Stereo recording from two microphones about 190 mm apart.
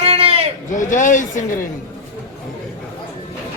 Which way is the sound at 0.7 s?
40° left (ahead or behind).